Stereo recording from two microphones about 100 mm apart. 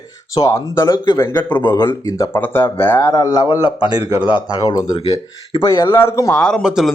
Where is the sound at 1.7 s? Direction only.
25° left (ahead or behind).